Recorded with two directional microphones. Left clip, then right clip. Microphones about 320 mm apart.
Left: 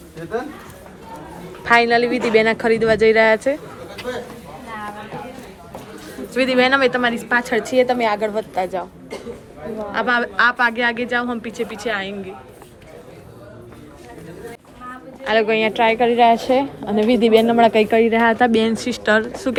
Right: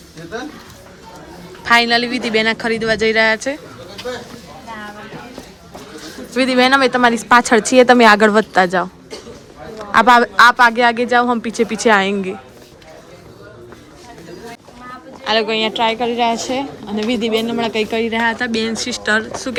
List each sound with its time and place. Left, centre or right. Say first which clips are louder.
1.6 s a woman's voice: right 1 dB; centre
6.3 s speech: right 3 dB; centre; by 8.9 s right
9.9 s speech: right 9 dB; centre
15.2 s a woman's voice: even; centre